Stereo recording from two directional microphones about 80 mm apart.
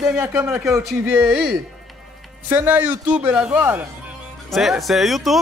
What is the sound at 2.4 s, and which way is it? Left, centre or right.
Speech, centre.